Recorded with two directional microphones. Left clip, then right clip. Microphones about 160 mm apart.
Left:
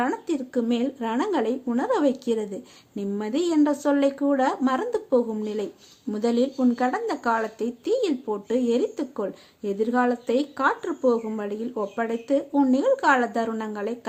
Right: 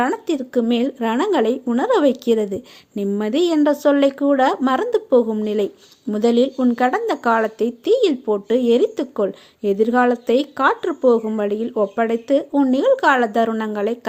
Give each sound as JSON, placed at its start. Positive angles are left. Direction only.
{"t": 0.0, "sound": "speech", "side_deg": -35}